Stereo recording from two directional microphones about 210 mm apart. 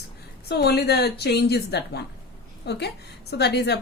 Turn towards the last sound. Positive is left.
turn(degrees=50)  # may be behind; listen again after turning